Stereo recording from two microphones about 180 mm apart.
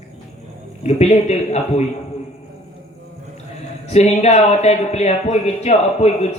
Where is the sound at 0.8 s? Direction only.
40° left (ahead or behind).